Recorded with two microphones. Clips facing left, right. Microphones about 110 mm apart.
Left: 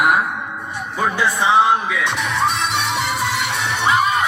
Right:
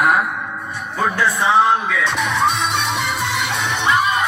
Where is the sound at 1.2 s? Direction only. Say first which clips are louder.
Even; 15° left (ahead or behind).